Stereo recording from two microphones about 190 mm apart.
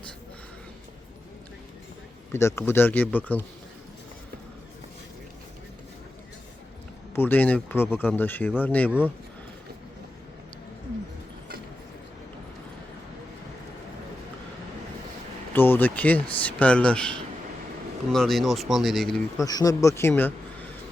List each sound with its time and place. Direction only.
2.3 s speech: 15° left (ahead or behind)
7.1 s speech: 10° left (ahead or behind)
15.5 s speech: 10° left (ahead or behind)
19.4 s speech: 20° left (ahead or behind)